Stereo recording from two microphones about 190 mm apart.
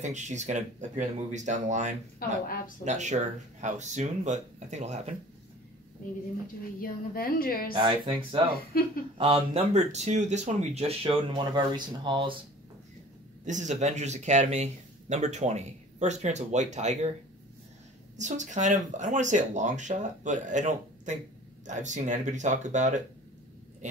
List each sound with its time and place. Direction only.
0.0 s speech: 40° right (ahead or behind)
2.1 s a woman's voice: 50° left (ahead or behind)
2.8 s speech: 40° right (ahead or behind)
6.4 s a woman's voice: 50° left (ahead or behind)
7.7 s speech: 25° right (ahead or behind)
8.7 s a woman's voice: 50° left (ahead or behind)
9.2 s speech: 30° right (ahead or behind)
13.5 s speech: 40° right (ahead or behind)
18.1 s speech: 40° right (ahead or behind)